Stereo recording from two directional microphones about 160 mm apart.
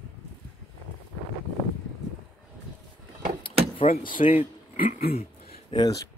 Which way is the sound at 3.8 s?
35° left (ahead or behind).